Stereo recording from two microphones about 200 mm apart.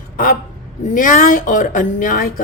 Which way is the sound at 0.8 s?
40° left (ahead or behind).